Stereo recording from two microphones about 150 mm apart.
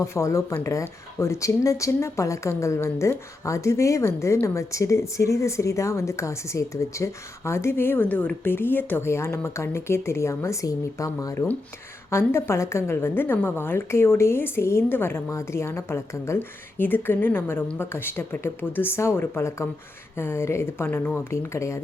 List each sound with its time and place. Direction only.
0.0 s a woman's voice: 20° left (ahead or behind)